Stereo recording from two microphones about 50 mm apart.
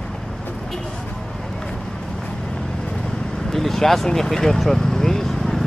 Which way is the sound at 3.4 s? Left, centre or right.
Centre.